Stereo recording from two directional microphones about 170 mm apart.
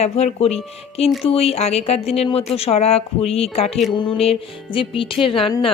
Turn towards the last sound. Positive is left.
turn(degrees=30)  # may be behind; listen again after turning